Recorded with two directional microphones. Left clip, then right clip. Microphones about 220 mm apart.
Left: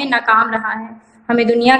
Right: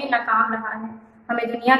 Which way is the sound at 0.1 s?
45° left (ahead or behind).